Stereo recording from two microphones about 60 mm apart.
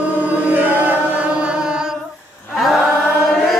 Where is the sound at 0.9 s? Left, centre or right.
Right.